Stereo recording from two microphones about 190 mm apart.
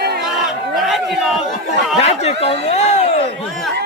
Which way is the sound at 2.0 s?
35° left (ahead or behind).